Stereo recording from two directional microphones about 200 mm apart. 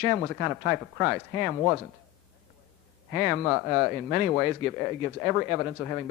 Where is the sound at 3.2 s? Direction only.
5° right (ahead or behind).